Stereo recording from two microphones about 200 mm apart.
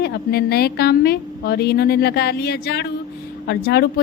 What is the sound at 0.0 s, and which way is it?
Speech, 50° left (ahead or behind).